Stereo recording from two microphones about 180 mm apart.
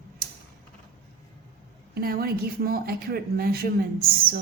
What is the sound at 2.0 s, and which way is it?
Speech, 55° right (ahead or behind).